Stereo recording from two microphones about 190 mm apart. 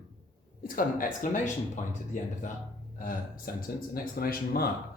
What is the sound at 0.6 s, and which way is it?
Speech, 45° left (ahead or behind).